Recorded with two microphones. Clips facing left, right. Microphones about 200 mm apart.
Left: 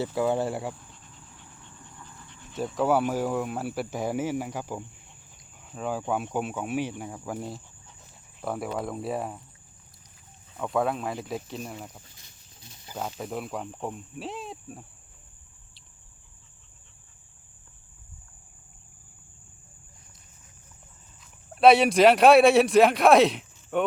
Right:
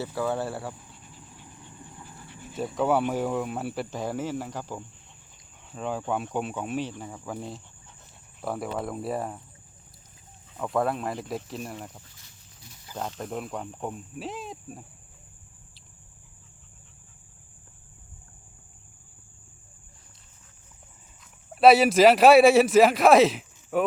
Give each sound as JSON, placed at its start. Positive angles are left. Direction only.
{"t": 0.0, "sound": "speech", "side_deg": 15}
{"t": 0.8, "sound": "a sound", "side_deg": -10}
{"t": 2.2, "sound": "speech", "side_deg": -10}
{"t": 10.6, "sound": "speech", "side_deg": 0}
{"t": 12.1, "sound": "a sound", "side_deg": 20}
{"t": 13.0, "sound": "speech", "side_deg": 5}
{"t": 21.5, "sound": "speech", "side_deg": -5}